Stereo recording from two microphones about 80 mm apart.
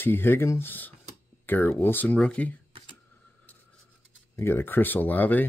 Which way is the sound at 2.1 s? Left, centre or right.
Centre.